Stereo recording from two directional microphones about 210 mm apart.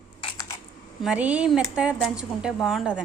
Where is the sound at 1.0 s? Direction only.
5° right (ahead or behind).